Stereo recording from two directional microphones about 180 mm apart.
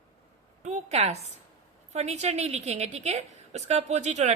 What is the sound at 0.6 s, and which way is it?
A woman's voice, 40° right (ahead or behind).